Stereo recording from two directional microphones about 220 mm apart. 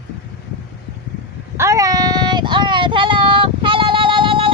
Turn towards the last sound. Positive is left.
turn(degrees=-25)  # may be behind; listen again after turning